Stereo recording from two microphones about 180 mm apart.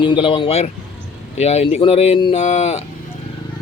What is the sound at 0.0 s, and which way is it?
A man's voice, 30° left (ahead or behind).